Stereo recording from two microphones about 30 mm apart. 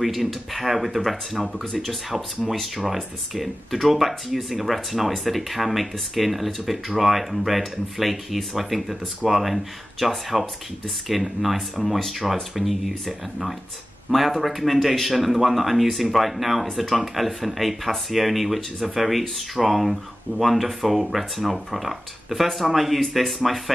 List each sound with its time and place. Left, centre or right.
0.0 s speech: centre
14.1 s speech: centre